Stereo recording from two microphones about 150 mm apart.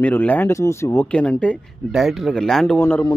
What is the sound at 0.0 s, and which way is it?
Speech, 10° left (ahead or behind).